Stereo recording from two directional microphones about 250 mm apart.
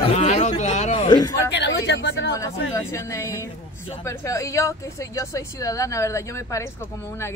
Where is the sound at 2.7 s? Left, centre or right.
Centre.